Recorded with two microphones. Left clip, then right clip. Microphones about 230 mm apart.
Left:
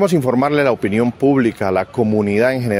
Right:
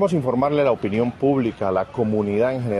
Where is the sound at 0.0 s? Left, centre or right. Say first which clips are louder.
Left 4 dB; left.